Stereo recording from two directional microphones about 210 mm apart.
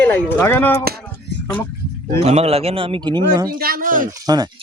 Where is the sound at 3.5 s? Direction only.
45° right (ahead or behind).